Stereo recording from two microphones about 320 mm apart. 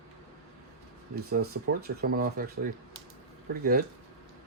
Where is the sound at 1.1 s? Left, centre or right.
Right.